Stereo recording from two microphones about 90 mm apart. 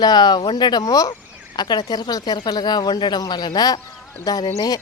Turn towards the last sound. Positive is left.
turn(degrees=45)  # may be behind; listen again after turning